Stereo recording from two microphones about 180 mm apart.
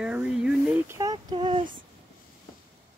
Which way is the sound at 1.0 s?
20° right (ahead or behind).